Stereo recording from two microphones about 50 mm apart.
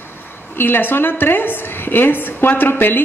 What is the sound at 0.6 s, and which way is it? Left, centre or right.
Speech, left.